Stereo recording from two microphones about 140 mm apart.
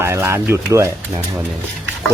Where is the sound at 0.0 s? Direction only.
20° right (ahead or behind).